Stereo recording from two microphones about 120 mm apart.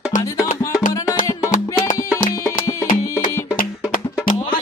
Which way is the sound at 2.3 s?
25° left (ahead or behind).